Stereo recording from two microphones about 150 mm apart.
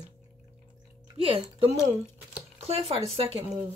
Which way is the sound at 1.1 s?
45° right (ahead or behind).